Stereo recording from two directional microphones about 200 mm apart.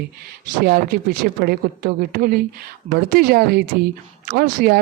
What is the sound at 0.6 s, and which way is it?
Speech, 50° right (ahead or behind).